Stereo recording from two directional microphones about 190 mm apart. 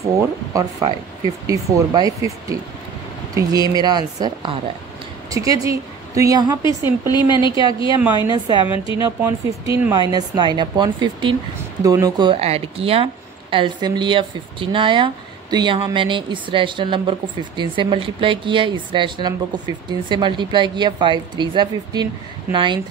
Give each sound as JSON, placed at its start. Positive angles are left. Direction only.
{"t": 0.5, "sound": "a woman's voice", "side_deg": -20}
{"t": 6.6, "sound": "a woman's voice", "side_deg": 20}
{"t": 8.3, "sound": "speech", "side_deg": -20}
{"t": 8.7, "sound": "a woman's voice", "side_deg": 25}
{"t": 9.0, "sound": "speech", "side_deg": -15}